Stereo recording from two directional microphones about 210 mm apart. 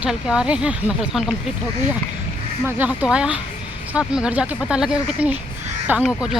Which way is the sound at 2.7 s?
10° right (ahead or behind).